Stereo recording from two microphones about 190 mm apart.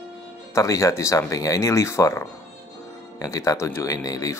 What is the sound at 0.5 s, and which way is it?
Speech, 15° left (ahead or behind).